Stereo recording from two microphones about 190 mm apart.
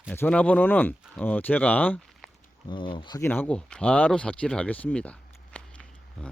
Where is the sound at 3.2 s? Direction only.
10° left (ahead or behind).